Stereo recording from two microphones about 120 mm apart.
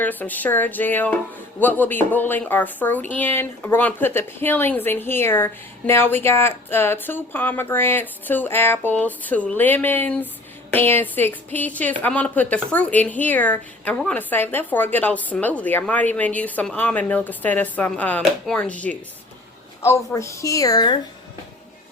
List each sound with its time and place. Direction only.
0.0 s speech: 15° left (ahead or behind)
19.8 s speech: 25° left (ahead or behind)